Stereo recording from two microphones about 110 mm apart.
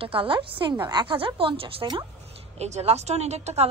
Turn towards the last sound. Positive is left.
turn(degrees=-80)